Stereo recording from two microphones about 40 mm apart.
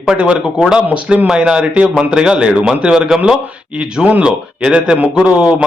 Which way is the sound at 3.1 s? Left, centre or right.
Centre.